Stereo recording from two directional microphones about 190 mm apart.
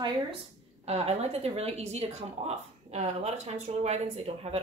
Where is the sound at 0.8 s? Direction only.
35° right (ahead or behind).